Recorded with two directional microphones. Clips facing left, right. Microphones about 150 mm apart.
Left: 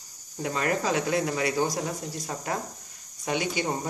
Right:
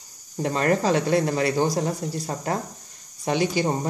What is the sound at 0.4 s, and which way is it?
Speech, 40° right (ahead or behind).